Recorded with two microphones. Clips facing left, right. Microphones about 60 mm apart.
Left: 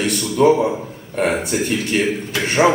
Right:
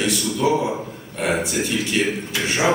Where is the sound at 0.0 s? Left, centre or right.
Left.